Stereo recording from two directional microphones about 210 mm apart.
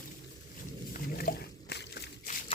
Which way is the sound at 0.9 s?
45° left (ahead or behind).